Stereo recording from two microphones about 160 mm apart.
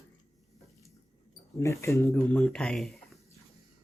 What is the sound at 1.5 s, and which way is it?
Speech, 15° left (ahead or behind).